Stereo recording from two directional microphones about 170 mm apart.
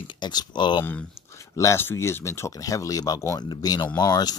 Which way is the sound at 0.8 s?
15° left (ahead or behind).